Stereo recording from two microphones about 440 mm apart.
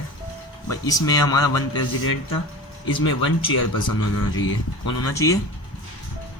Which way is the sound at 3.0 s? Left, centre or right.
Left.